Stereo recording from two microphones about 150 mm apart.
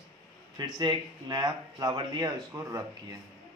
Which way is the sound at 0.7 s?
30° right (ahead or behind).